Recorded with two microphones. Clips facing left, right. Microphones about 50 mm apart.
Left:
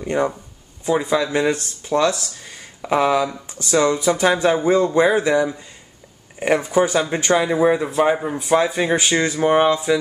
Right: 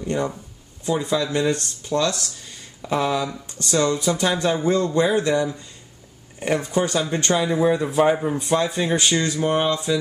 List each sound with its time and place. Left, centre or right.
0.0 s speech: centre
7.9 s speech: centre; by 9.8 s left